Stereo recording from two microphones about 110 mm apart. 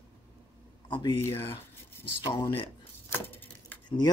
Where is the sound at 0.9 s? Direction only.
50° left (ahead or behind).